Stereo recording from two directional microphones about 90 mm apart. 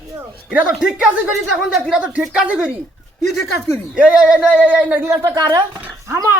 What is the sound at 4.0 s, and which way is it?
Speech, 10° right (ahead or behind).